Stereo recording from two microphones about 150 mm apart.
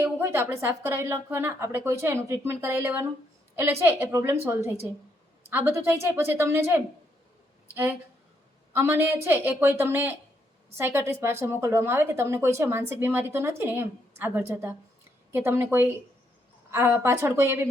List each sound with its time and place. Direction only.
0.0 s a woman's voice: 15° right (ahead or behind)
8.7 s a woman's voice: 15° right (ahead or behind)